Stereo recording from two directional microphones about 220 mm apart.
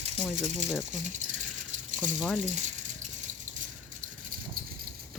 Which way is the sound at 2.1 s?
5° left (ahead or behind).